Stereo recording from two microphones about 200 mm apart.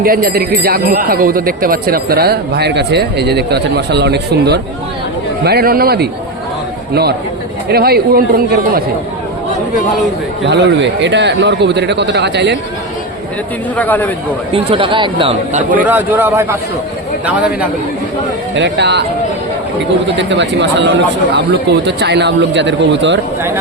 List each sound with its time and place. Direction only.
0.0 s speech: 45° right (ahead or behind)
10.4 s a man's voice: 60° right (ahead or behind)
13.7 s a man's voice: 10° left (ahead or behind)
14.5 s speech: 25° right (ahead or behind)
15.8 s speech: 10° right (ahead or behind)
18.5 s a man's voice: 60° right (ahead or behind)
20.1 s a man's voice: 65° right (ahead or behind)